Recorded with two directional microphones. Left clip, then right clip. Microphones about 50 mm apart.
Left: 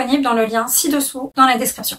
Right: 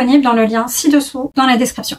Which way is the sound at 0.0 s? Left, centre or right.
Right.